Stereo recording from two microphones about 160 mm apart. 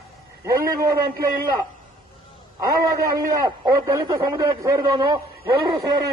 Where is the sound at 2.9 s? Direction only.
20° right (ahead or behind).